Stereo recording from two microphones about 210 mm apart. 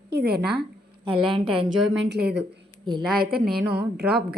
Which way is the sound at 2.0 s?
50° right (ahead or behind).